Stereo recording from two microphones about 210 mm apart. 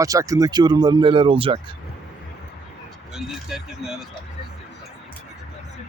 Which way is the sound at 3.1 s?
Centre (ahead or behind).